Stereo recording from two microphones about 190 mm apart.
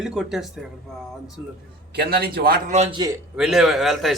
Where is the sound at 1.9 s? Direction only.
55° right (ahead or behind).